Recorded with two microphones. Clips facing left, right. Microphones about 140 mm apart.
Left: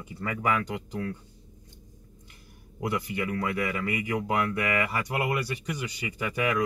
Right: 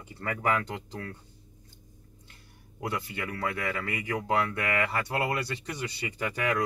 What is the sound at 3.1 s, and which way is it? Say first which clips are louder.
Speech: left 4 dB; 15° left (ahead or behind).